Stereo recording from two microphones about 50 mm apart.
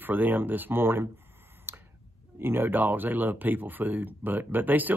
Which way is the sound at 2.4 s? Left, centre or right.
Right.